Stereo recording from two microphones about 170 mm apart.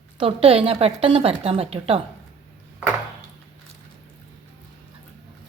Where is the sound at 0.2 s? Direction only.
35° right (ahead or behind).